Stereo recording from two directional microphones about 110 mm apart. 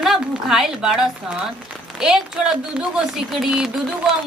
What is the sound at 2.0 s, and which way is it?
Speech, 5° right (ahead or behind).